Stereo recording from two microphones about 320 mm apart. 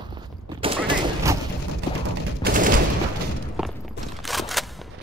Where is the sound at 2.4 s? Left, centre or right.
Right.